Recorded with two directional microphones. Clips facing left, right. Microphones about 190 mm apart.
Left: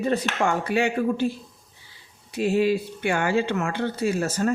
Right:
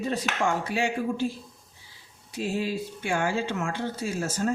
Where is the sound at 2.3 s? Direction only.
65° left (ahead or behind).